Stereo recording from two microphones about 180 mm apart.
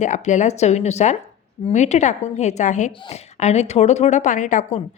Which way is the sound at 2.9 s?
30° left (ahead or behind).